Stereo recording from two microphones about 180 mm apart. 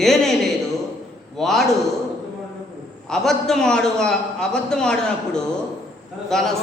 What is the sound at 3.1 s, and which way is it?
A man's voice, centre (ahead or behind).